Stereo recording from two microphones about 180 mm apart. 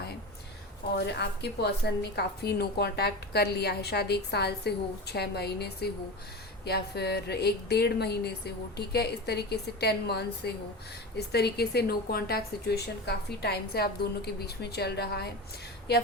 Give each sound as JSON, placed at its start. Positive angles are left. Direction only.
{"t": 0.9, "sound": "a woman's voice", "side_deg": 70}